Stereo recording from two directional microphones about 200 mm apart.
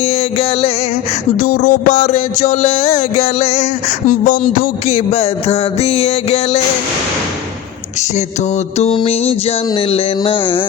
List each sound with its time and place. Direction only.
0.0 s music: 30° left (ahead or behind)
1.4 s music: 45° left (ahead or behind)
8.8 s music: 30° left (ahead or behind)